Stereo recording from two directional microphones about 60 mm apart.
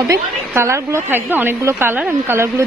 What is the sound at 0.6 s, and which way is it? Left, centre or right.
Speech, right.